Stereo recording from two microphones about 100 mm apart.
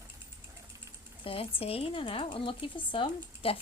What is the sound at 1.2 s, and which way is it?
Speech, 70° left (ahead or behind).